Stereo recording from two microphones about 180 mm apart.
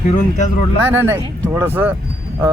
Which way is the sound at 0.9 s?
10° right (ahead or behind).